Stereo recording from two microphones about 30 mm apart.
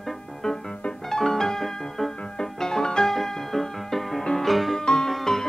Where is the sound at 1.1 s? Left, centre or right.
Centre.